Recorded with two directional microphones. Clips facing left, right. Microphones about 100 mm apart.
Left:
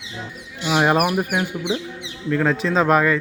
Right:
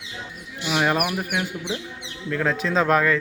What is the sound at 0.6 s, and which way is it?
Bird, 20° left (ahead or behind).